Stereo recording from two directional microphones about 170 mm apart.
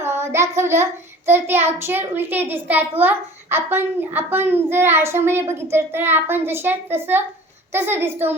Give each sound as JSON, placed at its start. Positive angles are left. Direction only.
{"t": 0.0, "sound": "child singing", "side_deg": -15}
{"t": 1.3, "sound": "a child's voice", "side_deg": -15}